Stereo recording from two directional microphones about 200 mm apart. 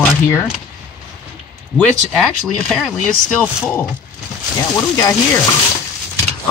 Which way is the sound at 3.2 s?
5° left (ahead or behind).